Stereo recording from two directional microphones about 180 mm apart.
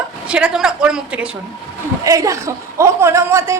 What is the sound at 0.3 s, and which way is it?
A man's voice, 5° right (ahead or behind).